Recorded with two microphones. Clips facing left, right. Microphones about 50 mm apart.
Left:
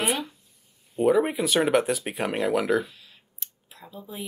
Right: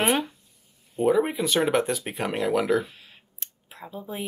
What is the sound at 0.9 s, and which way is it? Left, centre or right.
Speech, centre.